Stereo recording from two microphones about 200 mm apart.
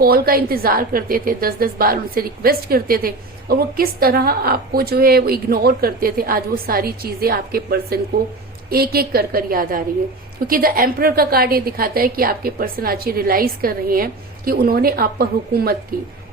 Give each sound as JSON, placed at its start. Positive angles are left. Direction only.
{"t": 0.0, "sound": "a woman's voice", "side_deg": -50}